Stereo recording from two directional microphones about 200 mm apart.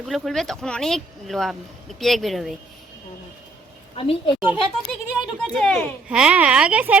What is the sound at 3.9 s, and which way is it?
Speech, 30° left (ahead or behind).